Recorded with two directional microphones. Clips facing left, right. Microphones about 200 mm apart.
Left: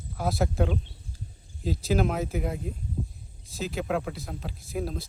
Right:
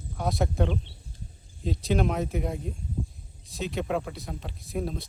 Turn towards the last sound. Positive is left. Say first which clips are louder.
# even
turn(degrees=0)  # may be behind; listen again after turning